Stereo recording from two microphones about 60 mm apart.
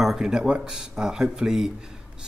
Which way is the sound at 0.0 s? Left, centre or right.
Centre.